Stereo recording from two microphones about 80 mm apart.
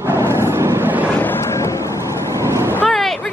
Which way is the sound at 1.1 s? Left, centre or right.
Left.